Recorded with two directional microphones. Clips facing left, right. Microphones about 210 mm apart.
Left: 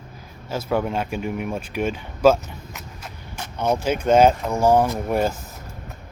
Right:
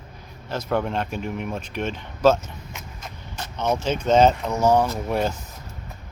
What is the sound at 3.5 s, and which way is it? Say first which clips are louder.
Speech: left 2 dB; 10° left (ahead or behind).